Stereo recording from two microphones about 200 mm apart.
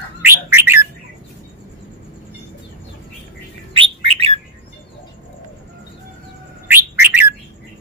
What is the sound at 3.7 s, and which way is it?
Bird, 25° right (ahead or behind).